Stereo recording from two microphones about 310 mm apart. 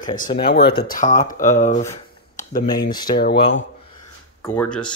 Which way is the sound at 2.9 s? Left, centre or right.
Centre.